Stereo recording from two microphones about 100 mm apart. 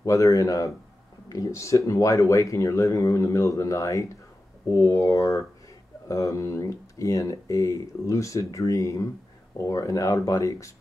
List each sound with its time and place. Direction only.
0.0 s speech: 35° left (ahead or behind)